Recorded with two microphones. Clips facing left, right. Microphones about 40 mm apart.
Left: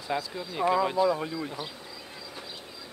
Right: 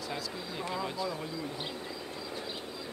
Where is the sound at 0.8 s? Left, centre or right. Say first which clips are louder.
Left 10 dB; left.